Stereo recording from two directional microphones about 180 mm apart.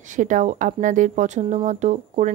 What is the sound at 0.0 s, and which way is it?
Speech, 45° right (ahead or behind).